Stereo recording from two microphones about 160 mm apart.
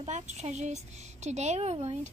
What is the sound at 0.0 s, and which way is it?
Speech, 45° right (ahead or behind).